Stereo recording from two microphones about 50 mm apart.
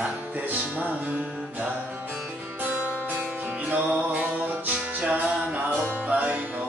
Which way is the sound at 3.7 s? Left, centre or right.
Right.